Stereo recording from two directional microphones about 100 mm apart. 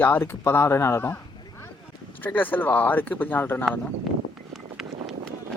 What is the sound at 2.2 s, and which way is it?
Speech, 20° left (ahead or behind).